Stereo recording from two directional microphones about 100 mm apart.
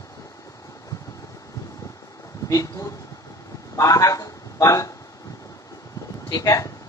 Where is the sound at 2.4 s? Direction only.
35° left (ahead or behind).